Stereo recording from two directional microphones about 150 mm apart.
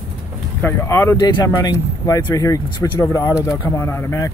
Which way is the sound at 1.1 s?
30° left (ahead or behind).